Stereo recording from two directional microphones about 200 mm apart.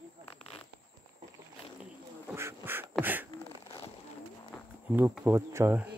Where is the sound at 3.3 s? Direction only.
30° left (ahead or behind).